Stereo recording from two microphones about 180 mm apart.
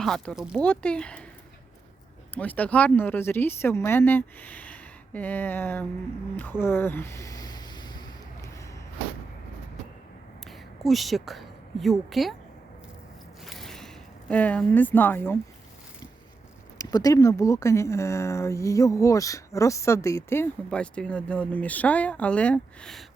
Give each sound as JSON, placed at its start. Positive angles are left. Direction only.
{"t": 0.0, "sound": "speech", "side_deg": 5}
{"t": 0.6, "sound": "speech", "side_deg": 5}
{"t": 2.3, "sound": "speech", "side_deg": 10}
{"t": 10.8, "sound": "a woman's voice", "side_deg": 0}
{"t": 13.4, "sound": "a sound", "side_deg": 0}
{"t": 16.7, "sound": "speech", "side_deg": 20}